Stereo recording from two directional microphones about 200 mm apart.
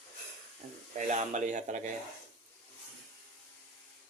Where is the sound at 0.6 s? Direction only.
40° right (ahead or behind).